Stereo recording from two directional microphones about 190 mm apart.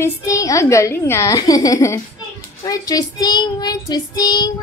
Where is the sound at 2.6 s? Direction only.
20° left (ahead or behind).